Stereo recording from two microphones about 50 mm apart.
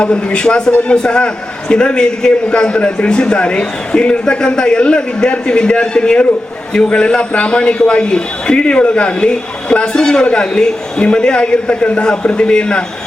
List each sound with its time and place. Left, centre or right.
0.0 s a man's voice: left